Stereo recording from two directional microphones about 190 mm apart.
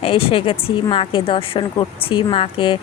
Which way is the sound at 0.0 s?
30° left (ahead or behind).